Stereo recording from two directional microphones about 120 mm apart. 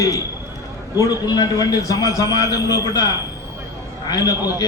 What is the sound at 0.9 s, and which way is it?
A man's voice, 30° left (ahead or behind).